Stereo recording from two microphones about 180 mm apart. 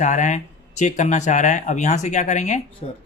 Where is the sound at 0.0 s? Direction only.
45° left (ahead or behind).